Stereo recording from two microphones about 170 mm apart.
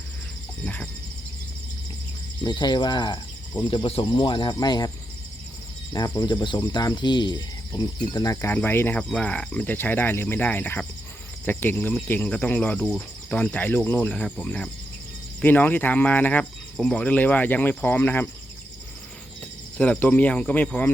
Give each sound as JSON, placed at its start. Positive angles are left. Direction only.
{"t": 0.6, "sound": "a sound", "side_deg": 10}
{"t": 2.4, "sound": "speech", "side_deg": 25}
{"t": 5.9, "sound": "speech", "side_deg": 25}
{"t": 19.7, "sound": "speech", "side_deg": 10}